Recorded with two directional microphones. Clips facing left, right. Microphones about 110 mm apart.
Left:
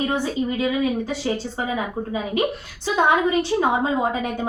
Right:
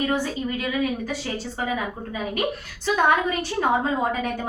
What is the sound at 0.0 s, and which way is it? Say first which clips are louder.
A woman's voice: left 2 dB; 25° left (ahead or behind).